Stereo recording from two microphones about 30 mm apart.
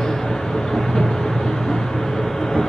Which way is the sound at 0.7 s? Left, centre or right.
Centre.